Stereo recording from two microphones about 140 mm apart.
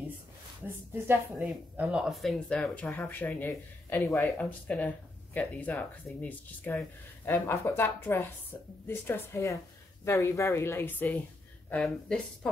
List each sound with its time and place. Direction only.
1.0 s speech: 10° right (ahead or behind); by 12.2 s 5° left (ahead or behind)